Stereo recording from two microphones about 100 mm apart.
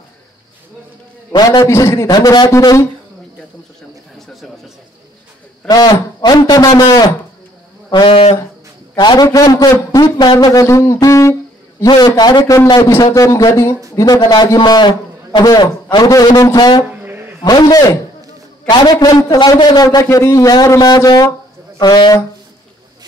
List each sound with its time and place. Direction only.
1.6 s a man's voice: 30° left (ahead or behind)
2.5 s a man's voice: 35° left (ahead or behind)
5.7 s a man's voice: 40° left (ahead or behind)
10.6 s speech: 30° left (ahead or behind)
11.9 s a man's voice: 45° left (ahead or behind)
13.1 s a man's voice: 35° left (ahead or behind)
17.0 s a sound: 20° right (ahead or behind)
17.4 s a man's voice: 45° left (ahead or behind)